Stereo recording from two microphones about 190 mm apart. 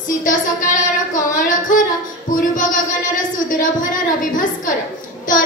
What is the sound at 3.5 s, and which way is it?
Child singing, 45° left (ahead or behind).